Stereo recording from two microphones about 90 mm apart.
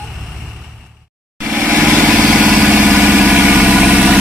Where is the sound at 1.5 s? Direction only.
15° right (ahead or behind).